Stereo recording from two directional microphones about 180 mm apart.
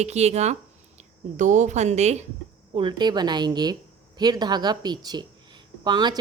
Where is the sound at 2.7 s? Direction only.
25° right (ahead or behind).